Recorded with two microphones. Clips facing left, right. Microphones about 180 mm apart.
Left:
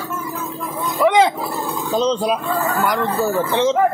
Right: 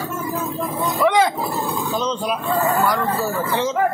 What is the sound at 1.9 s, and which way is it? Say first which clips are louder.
Speech: left 8 dB; 35° left (ahead or behind).